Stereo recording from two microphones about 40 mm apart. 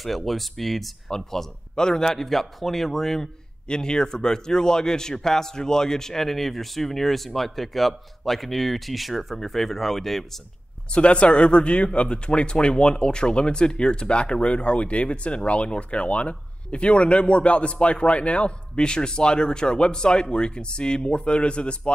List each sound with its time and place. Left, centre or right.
0.0 s a man's voice: centre
3.6 s a man's voice: centre
10.9 s a man's voice: left